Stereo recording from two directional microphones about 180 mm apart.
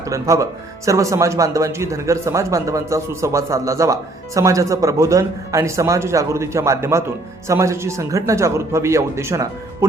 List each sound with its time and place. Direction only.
0.0 s speech: 15° right (ahead or behind)